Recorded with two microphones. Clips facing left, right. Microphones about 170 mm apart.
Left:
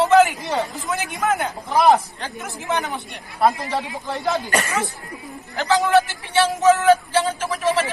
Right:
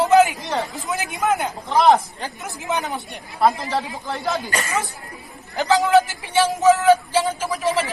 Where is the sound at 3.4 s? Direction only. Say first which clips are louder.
Even; centre (ahead or behind).